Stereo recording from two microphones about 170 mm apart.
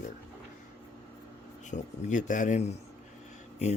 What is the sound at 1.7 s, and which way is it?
Speech, 45° left (ahead or behind).